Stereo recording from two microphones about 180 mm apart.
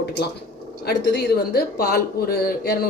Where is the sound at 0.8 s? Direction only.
65° left (ahead or behind).